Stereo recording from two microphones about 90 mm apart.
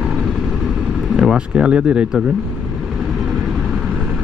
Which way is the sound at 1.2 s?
10° right (ahead or behind).